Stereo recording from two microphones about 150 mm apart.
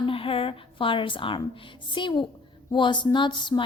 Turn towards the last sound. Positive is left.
turn(degrees=30)  # may be behind; listen again after turning